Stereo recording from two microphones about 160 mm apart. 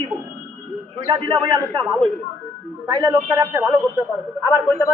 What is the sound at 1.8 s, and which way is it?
Speech, centre (ahead or behind).